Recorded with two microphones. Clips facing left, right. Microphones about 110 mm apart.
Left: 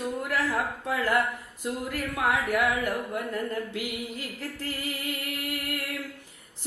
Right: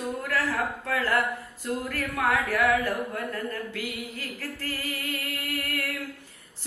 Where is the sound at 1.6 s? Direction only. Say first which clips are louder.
Even; 15° left (ahead or behind).